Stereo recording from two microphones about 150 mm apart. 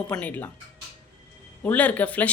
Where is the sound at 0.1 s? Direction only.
10° left (ahead or behind).